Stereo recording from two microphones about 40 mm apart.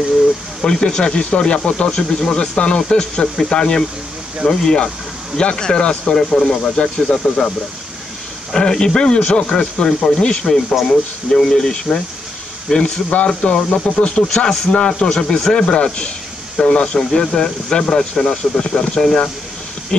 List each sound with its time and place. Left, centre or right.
0.6 s speech: centre
8.5 s speech: centre
10.5 s speech: centre
18.9 s speech: centre
19.9 s speech: left